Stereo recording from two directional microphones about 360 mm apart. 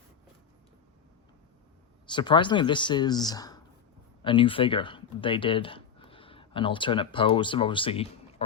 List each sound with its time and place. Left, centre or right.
2.0 s speech: centre